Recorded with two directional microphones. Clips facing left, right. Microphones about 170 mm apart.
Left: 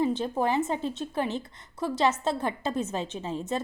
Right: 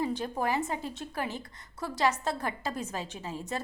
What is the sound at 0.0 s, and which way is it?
A woman's voice, 20° left (ahead or behind).